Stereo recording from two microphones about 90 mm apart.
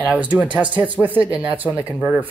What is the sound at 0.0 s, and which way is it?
Speech, 15° right (ahead or behind).